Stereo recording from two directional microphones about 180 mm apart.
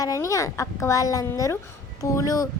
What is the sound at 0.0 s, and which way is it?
Speech, 20° left (ahead or behind).